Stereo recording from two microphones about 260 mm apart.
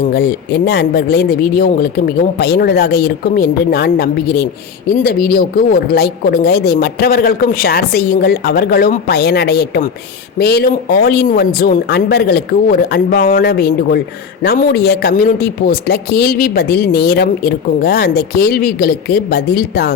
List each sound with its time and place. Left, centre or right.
0.2 s speech: left